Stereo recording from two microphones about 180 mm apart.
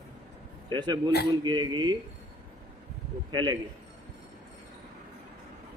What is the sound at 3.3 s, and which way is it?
Speech, 25° right (ahead or behind).